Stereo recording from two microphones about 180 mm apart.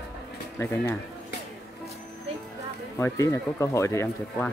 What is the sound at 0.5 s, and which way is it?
Speech, 15° left (ahead or behind).